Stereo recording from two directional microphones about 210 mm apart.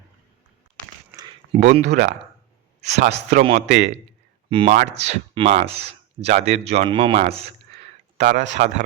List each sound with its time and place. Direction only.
1.5 s speech: 35° right (ahead or behind)